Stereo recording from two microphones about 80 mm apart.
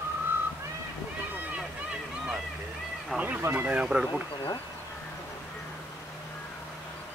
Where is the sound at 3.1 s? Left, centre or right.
Centre.